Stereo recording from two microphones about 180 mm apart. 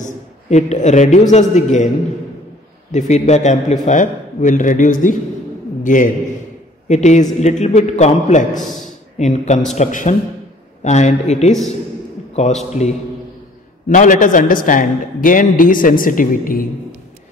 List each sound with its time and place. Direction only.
0.0 s a man's voice: 40° left (ahead or behind)
2.9 s a man's voice: 40° left (ahead or behind)
12.7 s a man's voice: 40° left (ahead or behind)